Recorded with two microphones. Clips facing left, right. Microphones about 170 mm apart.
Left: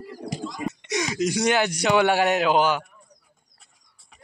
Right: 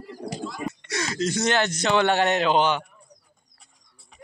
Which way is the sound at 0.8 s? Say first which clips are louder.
Left 3 dB; 15° left (ahead or behind).